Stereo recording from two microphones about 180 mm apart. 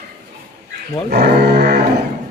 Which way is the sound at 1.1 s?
60° right (ahead or behind).